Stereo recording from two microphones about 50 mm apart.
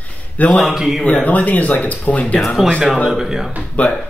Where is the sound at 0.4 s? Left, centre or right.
Left.